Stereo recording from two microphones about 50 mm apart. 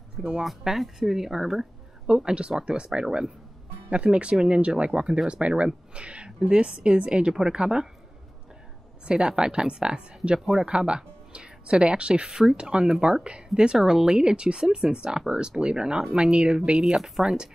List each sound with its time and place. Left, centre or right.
0.4 s a woman's voice: centre
9.0 s a woman's voice: centre